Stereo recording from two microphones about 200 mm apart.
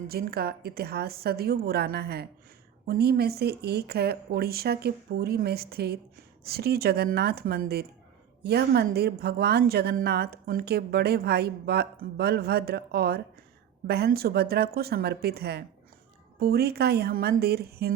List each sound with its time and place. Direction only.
0.1 s a woman's voice: 50° right (ahead or behind)